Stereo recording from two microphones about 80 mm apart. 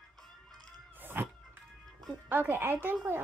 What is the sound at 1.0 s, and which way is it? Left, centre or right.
Music, right.